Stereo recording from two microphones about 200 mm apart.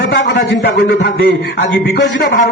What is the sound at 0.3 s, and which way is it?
A man's voice, 50° left (ahead or behind).